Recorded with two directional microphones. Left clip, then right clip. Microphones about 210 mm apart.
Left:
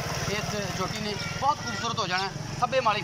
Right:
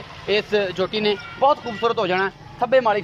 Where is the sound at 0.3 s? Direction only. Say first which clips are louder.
Right 10 dB; 50° right (ahead or behind).